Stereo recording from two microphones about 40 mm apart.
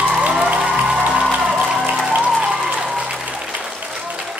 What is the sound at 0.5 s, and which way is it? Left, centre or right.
Music, right.